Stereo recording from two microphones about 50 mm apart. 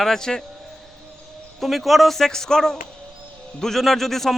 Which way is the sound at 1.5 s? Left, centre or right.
Centre.